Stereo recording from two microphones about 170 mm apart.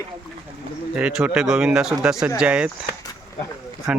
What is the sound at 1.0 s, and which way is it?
Speech, 5° right (ahead or behind).